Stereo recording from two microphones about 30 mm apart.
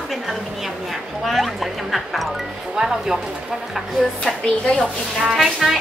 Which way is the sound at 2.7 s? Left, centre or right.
Right.